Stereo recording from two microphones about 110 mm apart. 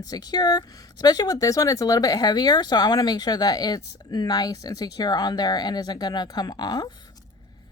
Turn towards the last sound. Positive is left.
turn(degrees=35)  # may be behind; listen again after turning